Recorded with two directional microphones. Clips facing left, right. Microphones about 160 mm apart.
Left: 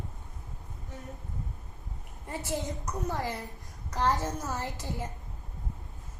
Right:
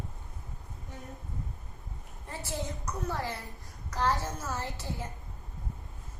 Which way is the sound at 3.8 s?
20° left (ahead or behind).